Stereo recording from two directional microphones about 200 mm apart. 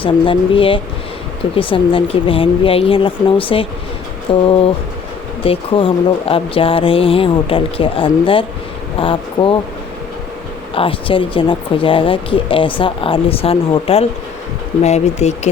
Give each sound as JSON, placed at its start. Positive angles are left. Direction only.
{"t": 0.0, "sound": "speech", "side_deg": 25}
{"t": 10.8, "sound": "speech", "side_deg": 25}